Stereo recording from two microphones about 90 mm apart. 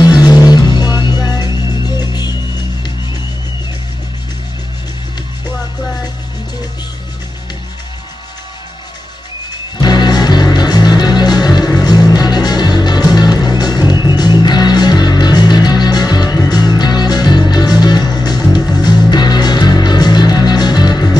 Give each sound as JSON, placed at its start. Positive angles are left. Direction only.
{"t": 0.0, "sound": "music", "side_deg": 50}
{"t": 9.8, "sound": "music", "side_deg": 55}